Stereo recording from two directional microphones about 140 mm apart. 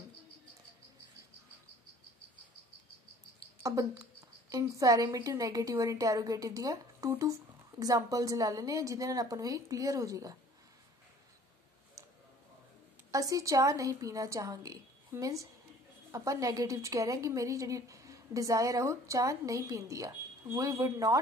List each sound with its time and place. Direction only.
3.3 s a woman's voice: 25° right (ahead or behind)
13.1 s a woman's voice: 25° right (ahead or behind)